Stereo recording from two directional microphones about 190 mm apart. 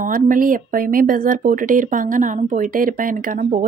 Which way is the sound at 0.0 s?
45° right (ahead or behind).